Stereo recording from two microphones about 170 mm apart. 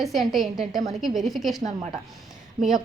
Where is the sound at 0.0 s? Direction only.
Centre (ahead or behind).